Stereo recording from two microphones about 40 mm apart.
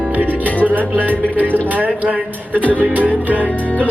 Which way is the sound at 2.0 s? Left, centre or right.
Right.